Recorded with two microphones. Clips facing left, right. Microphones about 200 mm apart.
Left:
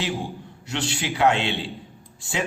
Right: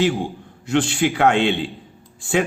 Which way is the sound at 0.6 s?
50° right (ahead or behind).